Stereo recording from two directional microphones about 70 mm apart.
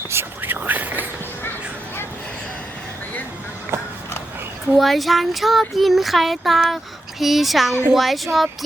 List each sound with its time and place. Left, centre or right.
0.1 s whispering: right
4.7 s speech: centre